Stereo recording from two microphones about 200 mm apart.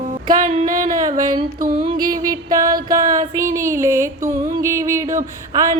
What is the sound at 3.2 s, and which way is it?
Music, 15° right (ahead or behind).